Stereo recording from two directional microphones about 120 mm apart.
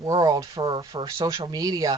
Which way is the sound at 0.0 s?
35° right (ahead or behind).